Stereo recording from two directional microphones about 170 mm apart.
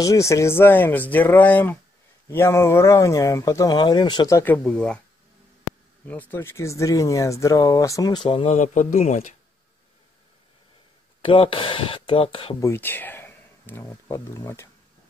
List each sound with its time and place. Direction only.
0.0 s speech: 20° left (ahead or behind)
4.6 s speech: 5° left (ahead or behind)
6.0 s speech: 10° left (ahead or behind); by 8.5 s 30° left (ahead or behind)
8.5 s speech: 45° left (ahead or behind)
11.2 s speech: 30° left (ahead or behind)
12.5 s speech: 15° left (ahead or behind)